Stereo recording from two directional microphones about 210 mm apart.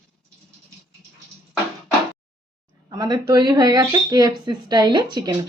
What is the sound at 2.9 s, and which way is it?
Speech, 20° right (ahead or behind).